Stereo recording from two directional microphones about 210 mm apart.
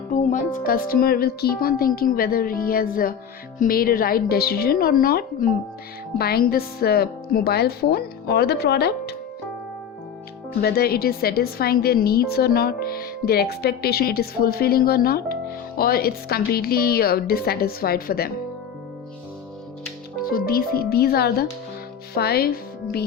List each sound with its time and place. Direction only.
0.1 s a woman's voice: 35° left (ahead or behind)
10.6 s a woman's voice: 50° left (ahead or behind)
20.2 s a woman's voice: 45° left (ahead or behind)